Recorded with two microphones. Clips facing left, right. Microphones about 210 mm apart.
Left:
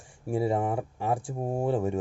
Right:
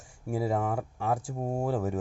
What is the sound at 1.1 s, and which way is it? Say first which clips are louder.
Speech: left 1 dB; 30° left (ahead or behind).